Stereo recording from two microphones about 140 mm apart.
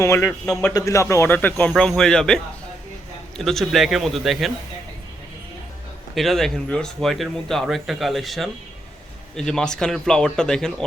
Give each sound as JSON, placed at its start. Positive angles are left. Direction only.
{"t": 0.0, "sound": "a man's voice", "side_deg": 20}
{"t": 0.3, "sound": "speech", "side_deg": 5}
{"t": 0.7, "sound": "speech", "side_deg": 25}
{"t": 6.1, "sound": "speech", "side_deg": 0}